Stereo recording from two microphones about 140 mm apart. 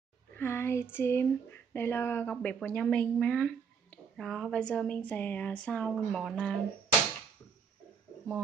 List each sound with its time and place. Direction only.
0.4 s speech: 15° left (ahead or behind)